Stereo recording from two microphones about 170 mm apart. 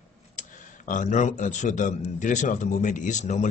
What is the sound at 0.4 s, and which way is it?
Speech, 50° left (ahead or behind).